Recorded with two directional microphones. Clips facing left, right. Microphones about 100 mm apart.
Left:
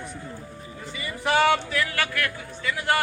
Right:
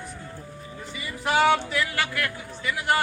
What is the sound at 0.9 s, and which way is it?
Speech, 10° right (ahead or behind).